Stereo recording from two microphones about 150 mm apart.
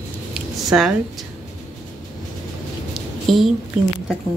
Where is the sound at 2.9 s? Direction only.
Centre (ahead or behind).